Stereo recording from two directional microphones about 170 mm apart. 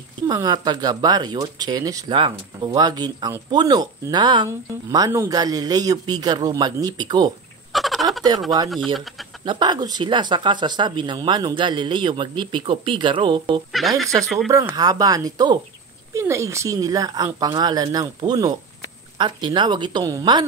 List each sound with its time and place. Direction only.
0.3 s speech: 20° right (ahead or behind)
7.7 s a sound: centre (ahead or behind)
8.6 s speech: centre (ahead or behind)
9.4 s speech: 25° right (ahead or behind)
13.7 s speech: centre (ahead or behind)
14.5 s speech: 20° right (ahead or behind)